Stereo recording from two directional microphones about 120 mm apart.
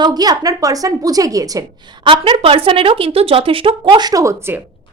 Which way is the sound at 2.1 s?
45° right (ahead or behind).